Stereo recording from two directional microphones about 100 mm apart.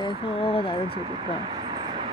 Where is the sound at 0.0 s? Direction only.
60° left (ahead or behind).